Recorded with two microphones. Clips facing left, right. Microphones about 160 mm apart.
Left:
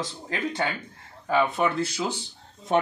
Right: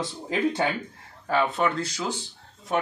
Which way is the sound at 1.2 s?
5° left (ahead or behind).